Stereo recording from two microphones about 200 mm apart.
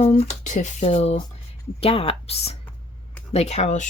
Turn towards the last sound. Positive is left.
turn(degrees=35)  # may be behind; listen again after turning